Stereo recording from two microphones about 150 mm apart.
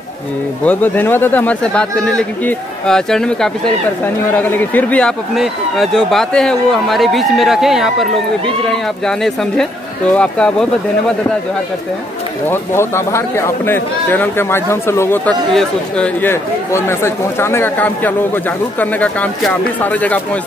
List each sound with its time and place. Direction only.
0.7 s a man's voice: 15° left (ahead or behind)
12.4 s speech: 15° left (ahead or behind)